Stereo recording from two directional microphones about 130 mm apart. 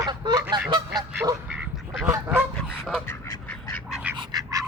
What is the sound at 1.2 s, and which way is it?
Speech, 25° right (ahead or behind).